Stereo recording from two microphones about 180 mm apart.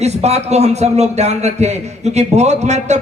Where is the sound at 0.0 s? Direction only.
35° right (ahead or behind).